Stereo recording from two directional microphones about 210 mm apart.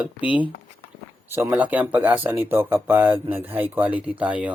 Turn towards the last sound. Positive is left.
turn(degrees=-5)  # may be behind; listen again after turning